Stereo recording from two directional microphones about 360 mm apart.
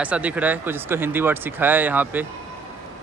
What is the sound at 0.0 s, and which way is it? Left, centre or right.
Speech, centre.